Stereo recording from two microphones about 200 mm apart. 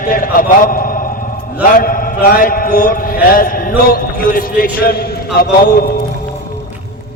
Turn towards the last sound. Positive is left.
turn(degrees=50)  # may be behind; listen again after turning